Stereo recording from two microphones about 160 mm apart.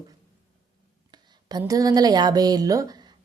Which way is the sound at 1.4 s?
25° right (ahead or behind).